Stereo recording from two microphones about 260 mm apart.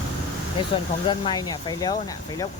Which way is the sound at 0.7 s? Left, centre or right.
Centre.